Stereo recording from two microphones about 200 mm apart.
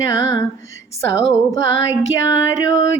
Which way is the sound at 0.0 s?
15° left (ahead or behind).